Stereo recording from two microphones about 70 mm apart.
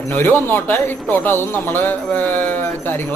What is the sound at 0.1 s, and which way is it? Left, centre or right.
Speech, left.